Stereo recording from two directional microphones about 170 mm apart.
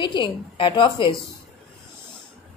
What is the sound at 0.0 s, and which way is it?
A woman's voice, 30° left (ahead or behind).